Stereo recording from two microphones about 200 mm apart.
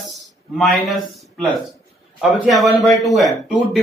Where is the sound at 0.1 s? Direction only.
Centre (ahead or behind).